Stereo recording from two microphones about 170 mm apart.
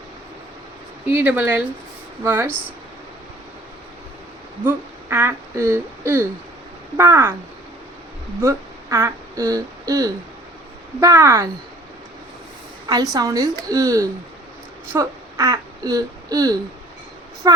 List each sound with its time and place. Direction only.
1.0 s speech: 10° right (ahead or behind)
4.6 s speech: 15° right (ahead or behind)
8.4 s speech: 15° right (ahead or behind)
13.1 s speech: 20° right (ahead or behind)